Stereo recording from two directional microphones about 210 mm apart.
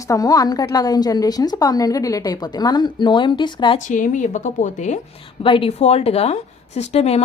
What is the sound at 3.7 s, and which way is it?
A woman's voice, 40° left (ahead or behind).